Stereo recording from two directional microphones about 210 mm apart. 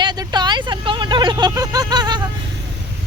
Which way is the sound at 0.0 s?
20° right (ahead or behind).